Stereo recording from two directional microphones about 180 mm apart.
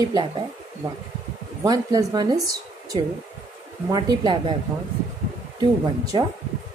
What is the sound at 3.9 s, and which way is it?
Speech, 25° right (ahead or behind).